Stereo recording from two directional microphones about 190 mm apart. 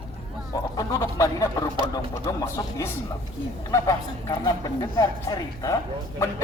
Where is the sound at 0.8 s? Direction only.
20° left (ahead or behind).